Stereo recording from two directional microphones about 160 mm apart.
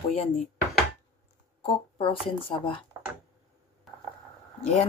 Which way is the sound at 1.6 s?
35° left (ahead or behind).